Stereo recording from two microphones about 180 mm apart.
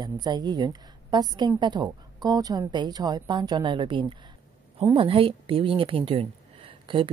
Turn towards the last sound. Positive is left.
turn(degrees=-30)  # may be behind; listen again after turning